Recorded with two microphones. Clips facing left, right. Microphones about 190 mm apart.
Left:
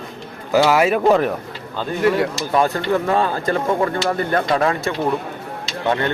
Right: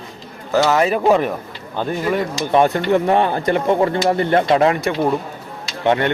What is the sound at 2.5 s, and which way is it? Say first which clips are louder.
Speech: right 5 dB; 20° right (ahead or behind).